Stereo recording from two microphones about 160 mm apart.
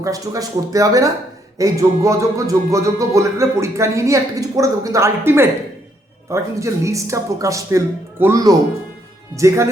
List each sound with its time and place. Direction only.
0.0 s speech: 20° right (ahead or behind)